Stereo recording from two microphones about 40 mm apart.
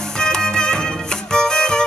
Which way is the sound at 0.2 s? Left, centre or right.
Centre.